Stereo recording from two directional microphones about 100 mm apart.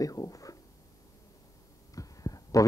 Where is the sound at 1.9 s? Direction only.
35° left (ahead or behind).